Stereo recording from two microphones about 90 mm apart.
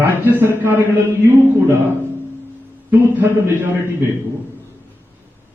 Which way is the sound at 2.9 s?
25° right (ahead or behind).